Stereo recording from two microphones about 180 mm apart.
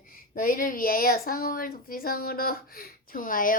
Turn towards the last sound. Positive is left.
turn(degrees=50)  # may be behind; listen again after turning